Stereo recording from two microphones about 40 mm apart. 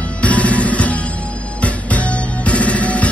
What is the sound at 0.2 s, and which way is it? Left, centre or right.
Music, left.